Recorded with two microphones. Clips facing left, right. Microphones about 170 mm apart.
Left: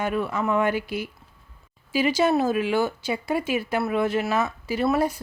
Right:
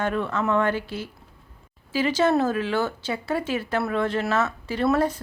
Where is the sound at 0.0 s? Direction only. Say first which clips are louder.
Even; 10° left (ahead or behind).